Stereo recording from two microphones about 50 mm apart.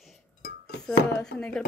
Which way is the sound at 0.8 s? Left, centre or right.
Centre.